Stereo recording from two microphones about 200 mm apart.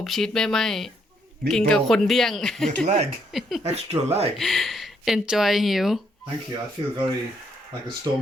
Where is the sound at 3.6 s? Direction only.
30° right (ahead or behind).